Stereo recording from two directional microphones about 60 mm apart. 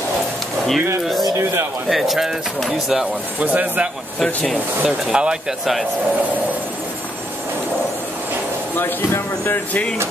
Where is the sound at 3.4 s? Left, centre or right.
Right.